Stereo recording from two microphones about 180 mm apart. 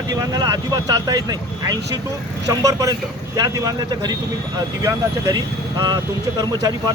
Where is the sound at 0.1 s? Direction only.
20° right (ahead or behind).